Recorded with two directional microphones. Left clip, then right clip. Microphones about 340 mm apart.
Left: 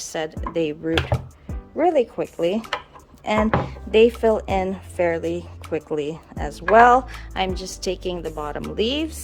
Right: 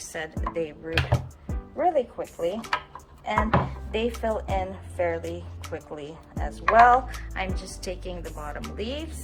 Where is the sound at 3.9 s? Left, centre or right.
Left.